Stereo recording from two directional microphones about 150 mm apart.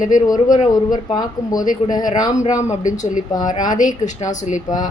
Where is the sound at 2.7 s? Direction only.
55° left (ahead or behind).